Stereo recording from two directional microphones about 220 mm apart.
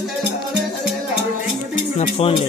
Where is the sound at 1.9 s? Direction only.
25° left (ahead or behind).